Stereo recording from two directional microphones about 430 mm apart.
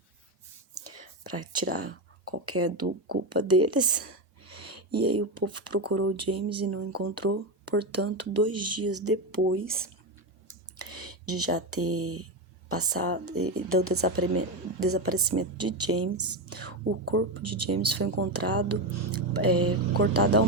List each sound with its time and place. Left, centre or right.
1.6 s speech: right
5.3 s speech: right
10.8 s a sound: right
11.3 s speech: right